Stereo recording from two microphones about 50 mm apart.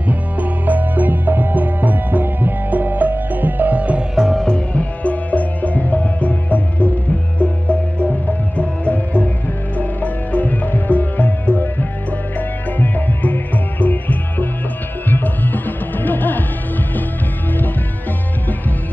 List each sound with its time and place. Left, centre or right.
0.1 s music: right
4.5 s music: left
8.3 s music: left